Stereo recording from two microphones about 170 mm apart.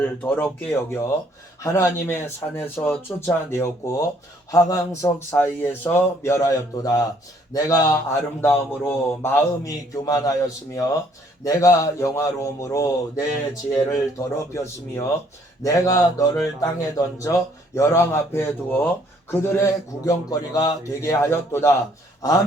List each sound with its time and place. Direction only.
0.0 s speech: 10° left (ahead or behind)